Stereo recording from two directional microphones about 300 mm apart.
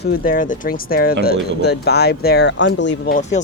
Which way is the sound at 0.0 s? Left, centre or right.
Left.